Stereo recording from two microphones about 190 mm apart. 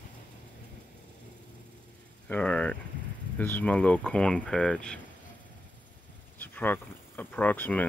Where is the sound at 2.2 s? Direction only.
5° left (ahead or behind).